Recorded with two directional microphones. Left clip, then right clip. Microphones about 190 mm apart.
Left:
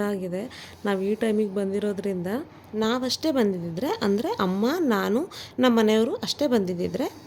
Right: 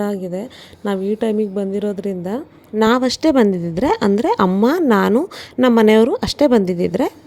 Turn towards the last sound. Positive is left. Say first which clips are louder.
# right 9 dB
turn(degrees=-40)  # may be behind; listen again after turning